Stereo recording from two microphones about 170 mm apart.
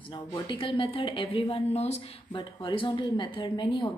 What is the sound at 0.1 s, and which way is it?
A woman's voice, 30° left (ahead or behind).